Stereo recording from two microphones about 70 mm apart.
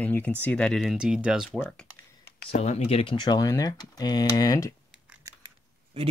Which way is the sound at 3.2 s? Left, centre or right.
Left.